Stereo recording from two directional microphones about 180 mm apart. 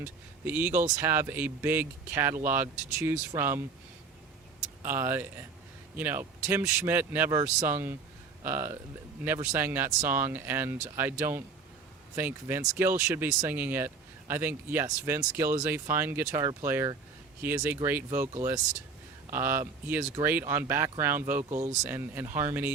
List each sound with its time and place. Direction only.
0.0 s speech: 10° right (ahead or behind)
4.8 s speech: 15° right (ahead or behind)